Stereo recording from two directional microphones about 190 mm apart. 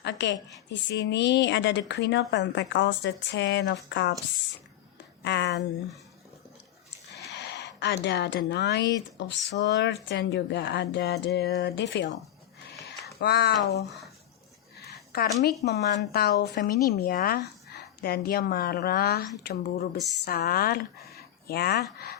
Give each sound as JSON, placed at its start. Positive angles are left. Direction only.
{"t": 0.0, "sound": "a woman's voice", "side_deg": 65}
{"t": 5.2, "sound": "speech", "side_deg": 65}
{"t": 7.3, "sound": "speech", "side_deg": 65}
{"t": 13.1, "sound": "speech", "side_deg": 60}
{"t": 14.8, "sound": "a woman's voice", "side_deg": 55}